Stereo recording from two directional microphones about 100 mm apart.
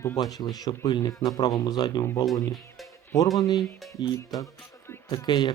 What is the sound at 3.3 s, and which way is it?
Speech, 40° left (ahead or behind).